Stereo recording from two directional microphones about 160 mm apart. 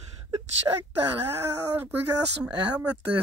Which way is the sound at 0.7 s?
15° right (ahead or behind).